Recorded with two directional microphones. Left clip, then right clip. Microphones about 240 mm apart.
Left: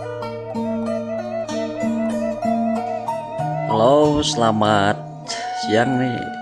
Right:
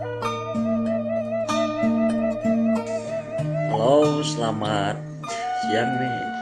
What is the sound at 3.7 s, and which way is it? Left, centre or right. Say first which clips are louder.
Music: left 4 dB; left.